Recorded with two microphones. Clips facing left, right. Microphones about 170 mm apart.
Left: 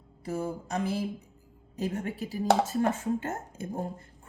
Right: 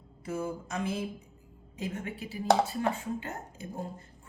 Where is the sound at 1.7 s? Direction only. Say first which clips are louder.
Left 4 dB; 40° left (ahead or behind).